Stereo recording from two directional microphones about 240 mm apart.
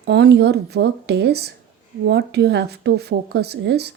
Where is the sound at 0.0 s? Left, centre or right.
Right.